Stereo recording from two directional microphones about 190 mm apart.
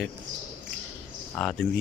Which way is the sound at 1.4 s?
Centre (ahead or behind).